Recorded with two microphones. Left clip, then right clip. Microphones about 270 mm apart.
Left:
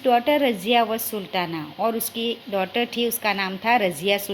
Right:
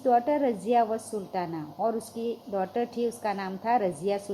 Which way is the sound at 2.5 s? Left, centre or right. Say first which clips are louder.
Left 5 dB; left.